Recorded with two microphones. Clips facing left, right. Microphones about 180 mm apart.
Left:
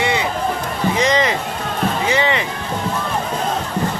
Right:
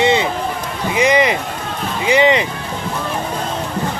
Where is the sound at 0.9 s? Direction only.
10° right (ahead or behind).